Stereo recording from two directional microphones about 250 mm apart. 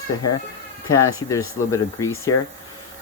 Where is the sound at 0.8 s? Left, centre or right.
Left.